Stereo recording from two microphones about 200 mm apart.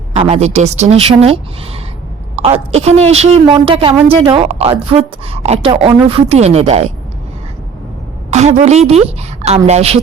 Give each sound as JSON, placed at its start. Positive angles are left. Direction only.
{"t": 0.2, "sound": "a woman's voice", "side_deg": -30}
{"t": 8.3, "sound": "speech", "side_deg": -35}